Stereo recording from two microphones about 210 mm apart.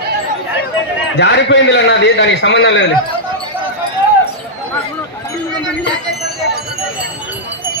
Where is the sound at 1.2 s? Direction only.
55° left (ahead or behind).